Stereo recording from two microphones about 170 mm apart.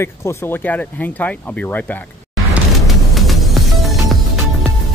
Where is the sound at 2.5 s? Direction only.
Centre (ahead or behind).